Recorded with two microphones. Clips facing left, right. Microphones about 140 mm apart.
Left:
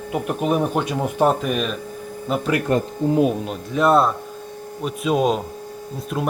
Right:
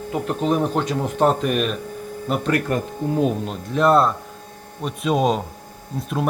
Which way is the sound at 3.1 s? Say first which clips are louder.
Left 2 dB; 5° left (ahead or behind).